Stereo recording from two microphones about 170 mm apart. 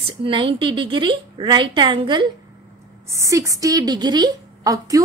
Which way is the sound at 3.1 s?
20° right (ahead or behind).